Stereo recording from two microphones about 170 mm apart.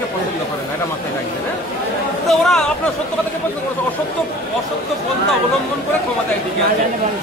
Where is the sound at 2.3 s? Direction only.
Centre (ahead or behind).